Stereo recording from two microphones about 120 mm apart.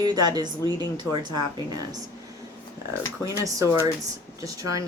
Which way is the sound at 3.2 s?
30° left (ahead or behind).